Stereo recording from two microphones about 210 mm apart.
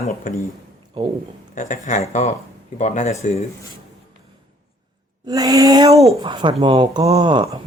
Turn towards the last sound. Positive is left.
turn(degrees=-25)  # may be behind; listen again after turning